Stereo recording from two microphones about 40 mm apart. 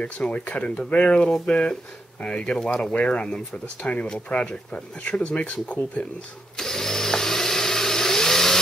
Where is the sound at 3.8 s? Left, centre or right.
Left.